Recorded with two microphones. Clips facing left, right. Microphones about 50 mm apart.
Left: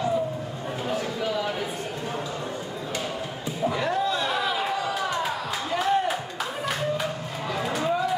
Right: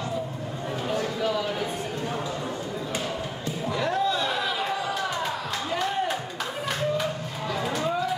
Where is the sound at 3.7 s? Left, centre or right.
Centre.